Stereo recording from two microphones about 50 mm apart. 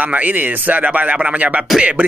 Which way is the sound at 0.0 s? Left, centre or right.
Right.